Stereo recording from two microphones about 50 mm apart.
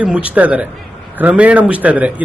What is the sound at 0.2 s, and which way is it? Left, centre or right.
A man's voice, right.